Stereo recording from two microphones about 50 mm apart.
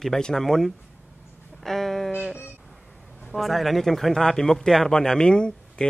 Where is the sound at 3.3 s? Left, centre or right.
Centre.